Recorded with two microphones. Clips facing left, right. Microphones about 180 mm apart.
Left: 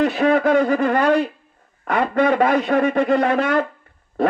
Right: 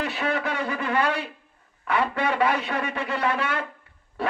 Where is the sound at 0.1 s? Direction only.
55° left (ahead or behind).